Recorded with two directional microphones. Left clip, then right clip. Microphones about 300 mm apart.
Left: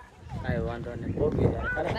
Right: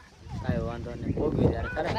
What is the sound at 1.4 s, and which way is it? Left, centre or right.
Speech, right.